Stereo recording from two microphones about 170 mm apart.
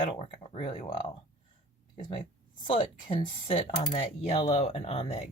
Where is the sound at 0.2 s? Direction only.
30° left (ahead or behind).